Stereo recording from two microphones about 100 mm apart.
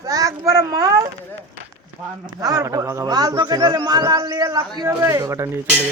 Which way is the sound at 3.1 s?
40° right (ahead or behind).